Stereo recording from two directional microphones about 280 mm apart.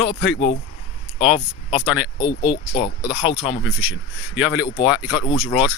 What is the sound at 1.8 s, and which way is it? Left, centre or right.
Speech, centre.